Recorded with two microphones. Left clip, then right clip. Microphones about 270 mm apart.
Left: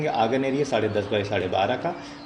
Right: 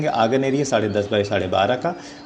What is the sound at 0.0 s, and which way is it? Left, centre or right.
A man's voice, right.